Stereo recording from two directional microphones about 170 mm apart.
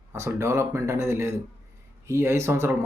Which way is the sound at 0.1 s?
15° right (ahead or behind).